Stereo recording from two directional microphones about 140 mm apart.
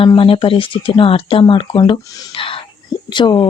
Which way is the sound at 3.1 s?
35° left (ahead or behind).